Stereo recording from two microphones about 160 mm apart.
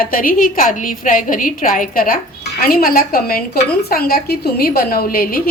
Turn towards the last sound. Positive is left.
turn(degrees=65)  # may be behind; listen again after turning